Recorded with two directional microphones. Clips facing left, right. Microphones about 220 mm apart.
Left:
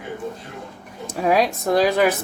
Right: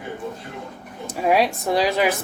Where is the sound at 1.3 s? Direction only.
45° left (ahead or behind).